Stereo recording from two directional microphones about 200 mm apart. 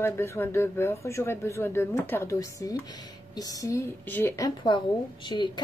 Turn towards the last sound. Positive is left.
turn(degrees=25)  # may be behind; listen again after turning